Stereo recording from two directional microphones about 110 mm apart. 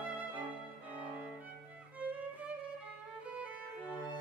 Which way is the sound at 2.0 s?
10° right (ahead or behind).